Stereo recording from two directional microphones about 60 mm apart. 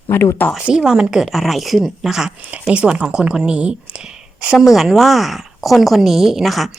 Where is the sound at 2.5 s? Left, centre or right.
Centre.